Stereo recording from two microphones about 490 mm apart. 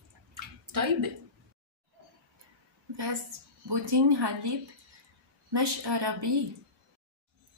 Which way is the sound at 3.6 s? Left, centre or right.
Right.